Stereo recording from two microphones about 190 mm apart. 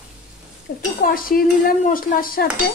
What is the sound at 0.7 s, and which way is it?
Stir, 55° left (ahead or behind).